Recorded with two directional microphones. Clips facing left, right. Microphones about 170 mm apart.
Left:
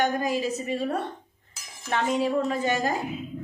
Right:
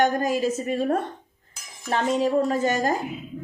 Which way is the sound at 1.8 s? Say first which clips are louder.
Right 2 dB; 35° right (ahead or behind).